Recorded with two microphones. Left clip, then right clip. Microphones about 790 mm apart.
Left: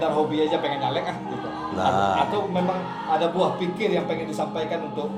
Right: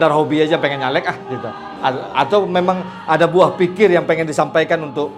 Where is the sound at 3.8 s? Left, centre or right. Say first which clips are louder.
Right 12 dB; right.